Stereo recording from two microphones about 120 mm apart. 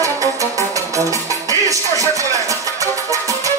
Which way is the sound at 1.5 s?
30° right (ahead or behind).